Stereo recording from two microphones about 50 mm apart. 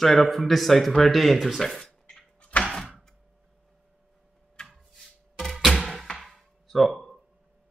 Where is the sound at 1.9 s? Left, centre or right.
Left.